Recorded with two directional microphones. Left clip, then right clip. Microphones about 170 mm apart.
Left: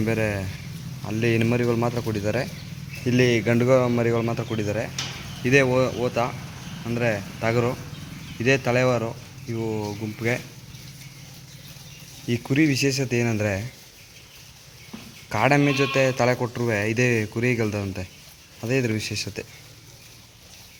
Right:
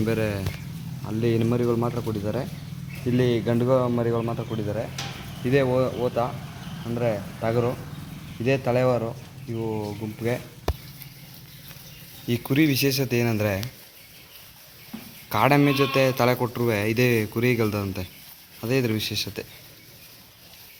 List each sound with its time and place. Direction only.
0.0 s a man's voice: 10° left (ahead or behind)
12.3 s speech: 5° left (ahead or behind)
15.3 s a man's voice: 5° left (ahead or behind)